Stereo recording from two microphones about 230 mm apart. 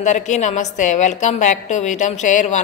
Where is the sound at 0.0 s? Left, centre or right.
Left.